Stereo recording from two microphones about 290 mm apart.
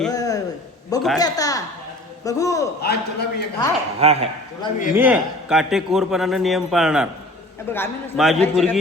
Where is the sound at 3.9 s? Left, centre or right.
Right.